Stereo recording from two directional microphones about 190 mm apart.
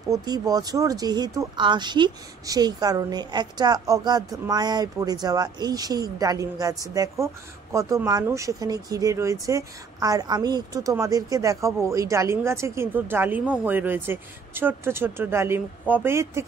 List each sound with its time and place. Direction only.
0.1 s speech: 20° right (ahead or behind)